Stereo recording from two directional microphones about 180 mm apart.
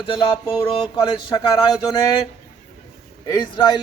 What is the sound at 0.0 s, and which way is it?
A man's voice, 30° left (ahead or behind).